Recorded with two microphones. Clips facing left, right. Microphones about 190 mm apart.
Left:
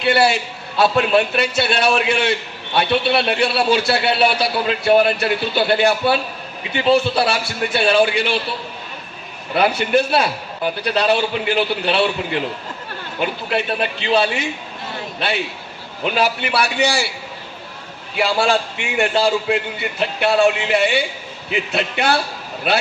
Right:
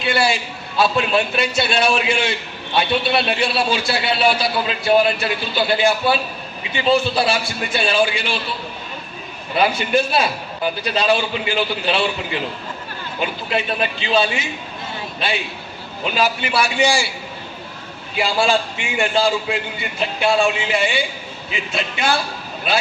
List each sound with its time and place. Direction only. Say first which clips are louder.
0.0 s a sound: left 3 dB; 65° left (ahead or behind)
0.8 s a man's voice: left 3 dB; 60° left (ahead or behind)
9.6 s a man's voice: left 1 dB; 65° left (ahead or behind)
16.1 s a man's voice: even; 65° left (ahead or behind)
18.2 s a man's voice: left 1 dB; 65° left (ahead or behind)